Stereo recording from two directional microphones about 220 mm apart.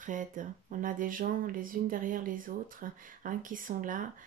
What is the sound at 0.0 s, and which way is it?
Speech, 35° right (ahead or behind).